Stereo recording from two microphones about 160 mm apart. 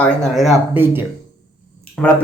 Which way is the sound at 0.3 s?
Centre (ahead or behind).